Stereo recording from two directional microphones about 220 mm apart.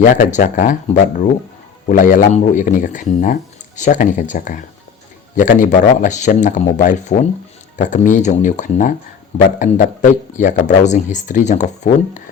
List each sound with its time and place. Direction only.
0.0 s speech: 35° left (ahead or behind)